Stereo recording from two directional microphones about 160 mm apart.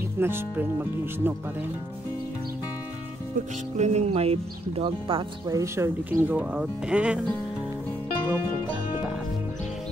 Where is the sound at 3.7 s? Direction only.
45° right (ahead or behind).